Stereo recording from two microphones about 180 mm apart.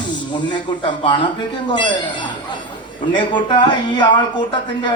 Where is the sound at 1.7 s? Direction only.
25° left (ahead or behind).